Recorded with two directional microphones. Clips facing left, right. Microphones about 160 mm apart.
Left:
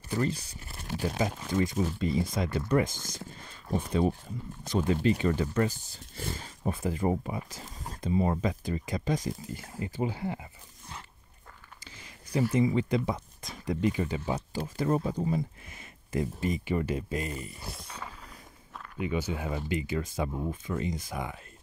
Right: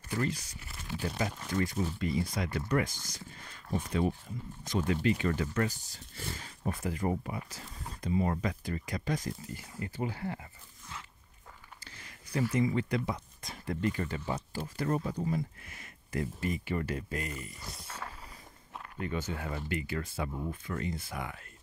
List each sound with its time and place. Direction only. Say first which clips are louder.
0.1 s speech: left 3 dB; 30° left (ahead or behind)
3.0 s speech: left 6 dB; 50° left (ahead or behind)
3.7 s speech: left 3 dB; 35° left (ahead or behind)
7.6 s a sound: left 3 dB; 45° left (ahead or behind)
8.0 s speech: left 3 dB; 25° left (ahead or behind)
12.4 s speech: left 3 dB; 25° left (ahead or behind)
17.7 s a sound: left 1 dB; centre (ahead or behind)
18.9 s speech: left 4 dB; 10° left (ahead or behind)